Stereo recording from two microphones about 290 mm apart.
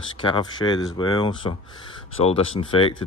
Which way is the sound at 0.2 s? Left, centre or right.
Centre.